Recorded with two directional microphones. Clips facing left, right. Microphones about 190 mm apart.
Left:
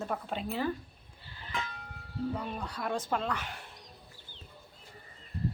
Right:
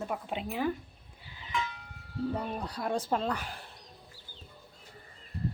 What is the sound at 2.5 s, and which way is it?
Speech, 35° right (ahead or behind).